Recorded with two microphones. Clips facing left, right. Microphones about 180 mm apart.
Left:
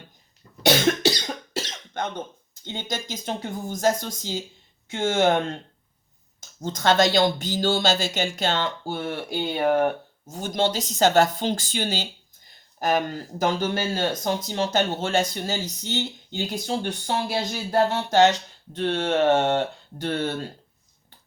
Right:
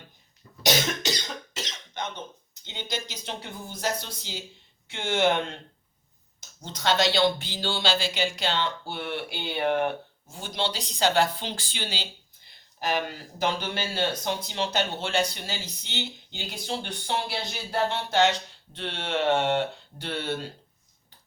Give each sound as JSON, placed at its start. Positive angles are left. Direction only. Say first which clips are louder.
{"t": 1.9, "sound": "cough", "louder": "left 6 dB", "side_deg": 55}
{"t": 2.6, "sound": "speech", "louder": "left 3 dB", "side_deg": 50}
{"t": 6.6, "sound": "speech", "louder": "left 5 dB", "side_deg": 50}